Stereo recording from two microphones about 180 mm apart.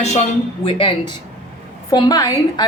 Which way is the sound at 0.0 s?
35° left (ahead or behind).